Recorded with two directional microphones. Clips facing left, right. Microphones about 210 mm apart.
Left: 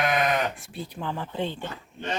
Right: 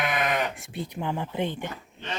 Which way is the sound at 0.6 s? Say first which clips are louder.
Right 2 dB; 20° right (ahead or behind).